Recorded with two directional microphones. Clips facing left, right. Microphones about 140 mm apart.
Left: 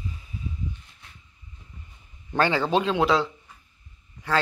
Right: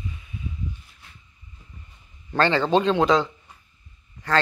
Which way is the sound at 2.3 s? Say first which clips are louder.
Right 2 dB; 10° left (ahead or behind).